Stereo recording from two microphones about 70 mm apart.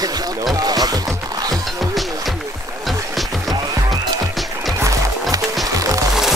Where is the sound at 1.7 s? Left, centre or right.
Centre.